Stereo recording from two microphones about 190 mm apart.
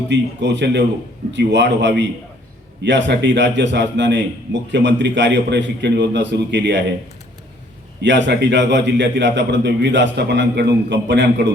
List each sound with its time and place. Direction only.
0.1 s a man's voice: 70° right (ahead or behind)
8.0 s a man's voice: 70° right (ahead or behind)